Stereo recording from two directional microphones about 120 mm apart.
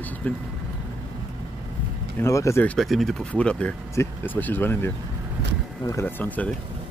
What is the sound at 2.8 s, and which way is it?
Speech, centre (ahead or behind).